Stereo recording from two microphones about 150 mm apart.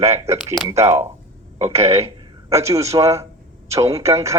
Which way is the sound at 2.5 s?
20° right (ahead or behind).